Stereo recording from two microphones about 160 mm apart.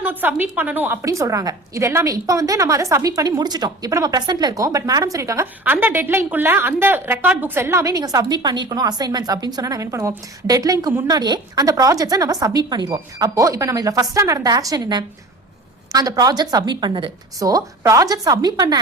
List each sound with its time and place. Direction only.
0.0 s a woman's voice: 10° right (ahead or behind)